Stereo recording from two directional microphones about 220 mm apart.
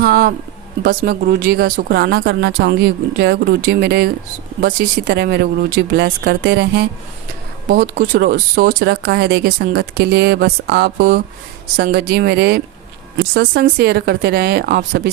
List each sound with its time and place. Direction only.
0.0 s speech: 45° right (ahead or behind)
7.7 s speech: 35° right (ahead or behind)